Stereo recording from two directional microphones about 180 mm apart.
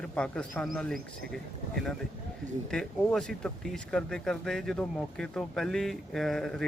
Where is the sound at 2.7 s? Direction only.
5° left (ahead or behind).